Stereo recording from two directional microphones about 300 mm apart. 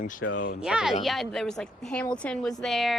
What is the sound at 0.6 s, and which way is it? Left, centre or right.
A woman's voice, centre.